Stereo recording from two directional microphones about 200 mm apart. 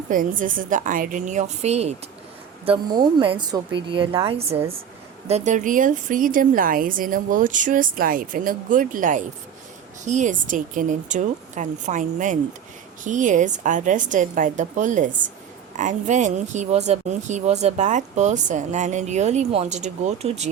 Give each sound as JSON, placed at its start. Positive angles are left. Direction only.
{"t": 0.1, "sound": "a woman's voice", "side_deg": -40}